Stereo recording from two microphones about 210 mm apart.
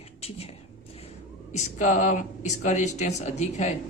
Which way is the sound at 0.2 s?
30° left (ahead or behind).